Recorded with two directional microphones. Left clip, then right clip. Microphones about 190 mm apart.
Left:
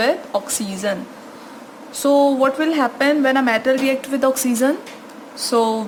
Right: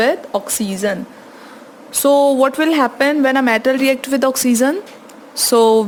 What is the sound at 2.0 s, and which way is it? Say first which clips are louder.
Speech: right 3 dB; 55° right (ahead or behind).